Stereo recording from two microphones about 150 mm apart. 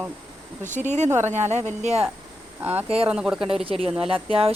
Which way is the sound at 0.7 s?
50° right (ahead or behind).